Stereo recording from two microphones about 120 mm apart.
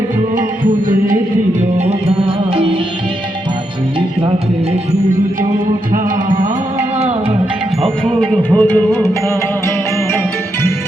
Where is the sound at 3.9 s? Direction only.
50° right (ahead or behind).